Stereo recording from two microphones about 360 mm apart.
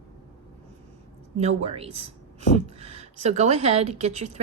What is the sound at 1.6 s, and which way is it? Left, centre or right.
A woman's voice, centre.